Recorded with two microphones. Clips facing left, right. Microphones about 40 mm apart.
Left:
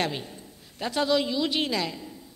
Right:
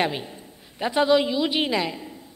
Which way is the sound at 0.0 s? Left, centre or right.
Centre.